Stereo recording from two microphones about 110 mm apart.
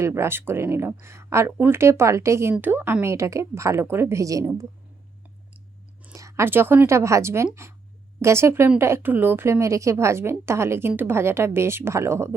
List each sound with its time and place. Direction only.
0.0 s speech: 25° right (ahead or behind)
6.1 s speech: 30° right (ahead or behind)